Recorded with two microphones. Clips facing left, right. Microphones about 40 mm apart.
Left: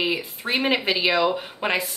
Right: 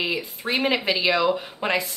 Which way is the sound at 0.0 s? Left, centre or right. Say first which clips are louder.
Left 1 dB; centre.